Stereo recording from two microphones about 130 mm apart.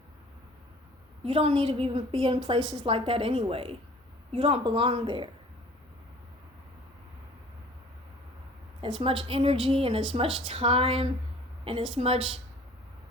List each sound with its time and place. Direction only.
1.2 s a woman's voice: 50° right (ahead or behind)
9.0 s a woman's voice: 45° right (ahead or behind)